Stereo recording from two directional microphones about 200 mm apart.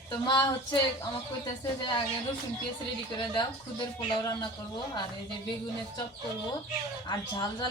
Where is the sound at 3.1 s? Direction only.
20° left (ahead or behind).